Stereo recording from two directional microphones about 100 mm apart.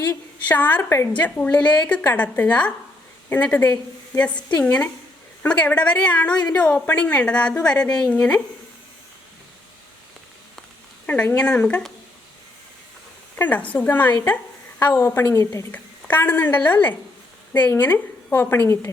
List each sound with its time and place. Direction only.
0.4 s speech: 15° left (ahead or behind)
1.1 s speech: 15° left (ahead or behind)
11.0 s speech: 15° left (ahead or behind)
13.3 s a woman's voice: 15° left (ahead or behind); by 15.6 s 30° left (ahead or behind)
15.7 s a woman's voice: 20° left (ahead or behind)